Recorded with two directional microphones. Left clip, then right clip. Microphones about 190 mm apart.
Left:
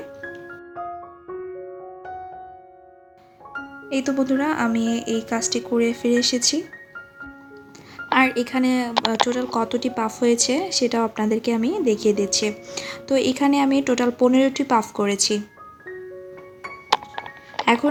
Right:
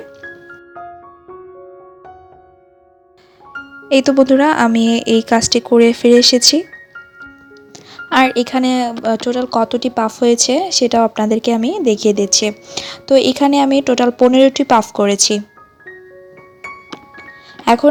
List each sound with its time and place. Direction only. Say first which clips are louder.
3.8 s speech: right 12 dB; 40° right (ahead or behind)
7.9 s speech: right 6 dB; 35° right (ahead or behind)